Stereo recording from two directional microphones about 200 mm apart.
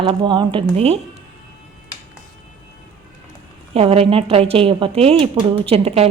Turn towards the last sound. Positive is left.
turn(degrees=-30)  # may be behind; listen again after turning